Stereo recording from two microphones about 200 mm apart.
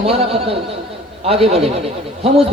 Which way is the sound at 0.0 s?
30° right (ahead or behind).